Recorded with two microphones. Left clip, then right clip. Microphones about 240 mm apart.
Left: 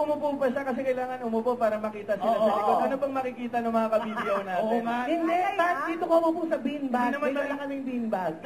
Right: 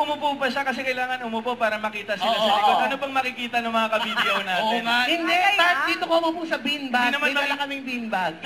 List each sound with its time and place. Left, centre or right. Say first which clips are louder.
0.0 s a man's voice: right 3 dB; right
2.2 s a man's voice: right 5 dB; centre